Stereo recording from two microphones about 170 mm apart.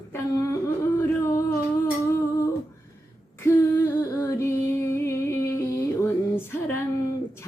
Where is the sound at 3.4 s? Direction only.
15° left (ahead or behind).